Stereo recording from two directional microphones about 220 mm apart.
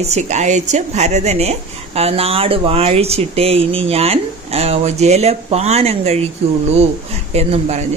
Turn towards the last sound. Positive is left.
turn(degrees=-30)  # may be behind; listen again after turning